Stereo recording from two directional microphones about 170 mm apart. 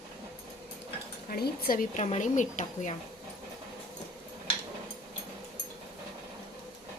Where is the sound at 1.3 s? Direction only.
60° left (ahead or behind).